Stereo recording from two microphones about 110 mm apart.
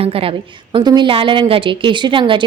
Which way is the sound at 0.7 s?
45° right (ahead or behind).